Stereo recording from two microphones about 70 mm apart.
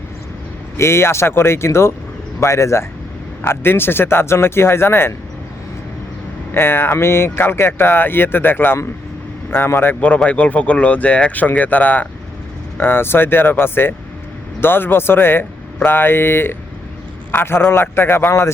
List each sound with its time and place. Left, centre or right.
0.8 s speech: left
3.4 s speech: left
6.5 s speech: left
9.9 s speech: centre; by 18.5 s left